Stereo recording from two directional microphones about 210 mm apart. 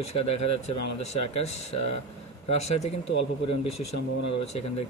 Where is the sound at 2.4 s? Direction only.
30° left (ahead or behind).